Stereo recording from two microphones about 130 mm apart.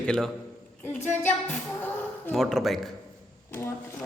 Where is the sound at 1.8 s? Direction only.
15° left (ahead or behind).